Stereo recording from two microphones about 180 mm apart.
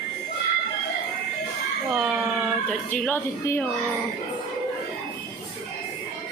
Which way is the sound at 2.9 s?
10° left (ahead or behind).